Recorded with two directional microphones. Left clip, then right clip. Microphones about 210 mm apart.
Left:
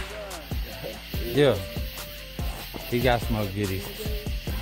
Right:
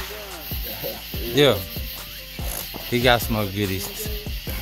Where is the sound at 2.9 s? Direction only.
20° right (ahead or behind).